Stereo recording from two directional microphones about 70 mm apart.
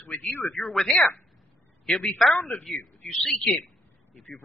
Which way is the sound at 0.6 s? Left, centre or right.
Centre.